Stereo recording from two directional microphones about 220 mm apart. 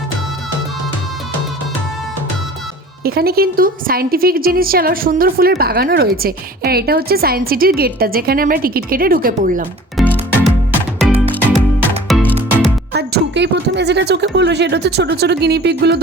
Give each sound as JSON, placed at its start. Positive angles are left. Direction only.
{"t": 3.0, "sound": "a woman's voice", "side_deg": -45}
{"t": 10.0, "sound": "music", "side_deg": 5}
{"t": 12.0, "sound": "music", "side_deg": 0}
{"t": 12.9, "sound": "speech", "side_deg": -50}